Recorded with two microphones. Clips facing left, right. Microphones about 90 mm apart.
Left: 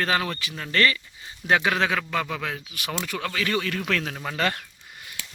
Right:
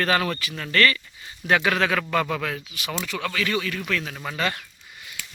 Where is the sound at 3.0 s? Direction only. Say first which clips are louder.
Right 1 dB; 35° left (ahead or behind); by 4.1 s 60° left (ahead or behind).